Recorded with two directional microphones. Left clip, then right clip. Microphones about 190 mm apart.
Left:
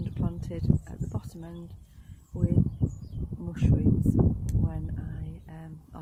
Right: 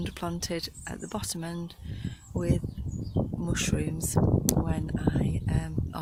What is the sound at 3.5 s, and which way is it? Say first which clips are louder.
Speech: left 6 dB; 15° right (ahead or behind).